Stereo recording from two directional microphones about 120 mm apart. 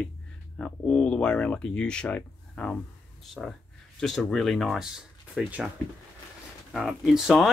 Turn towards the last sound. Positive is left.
turn(degrees=0)  # may be behind; listen again after turning